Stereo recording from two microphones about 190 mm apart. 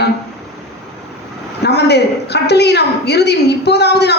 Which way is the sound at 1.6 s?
60° left (ahead or behind).